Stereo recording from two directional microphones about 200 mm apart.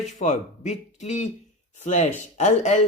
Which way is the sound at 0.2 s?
35° left (ahead or behind).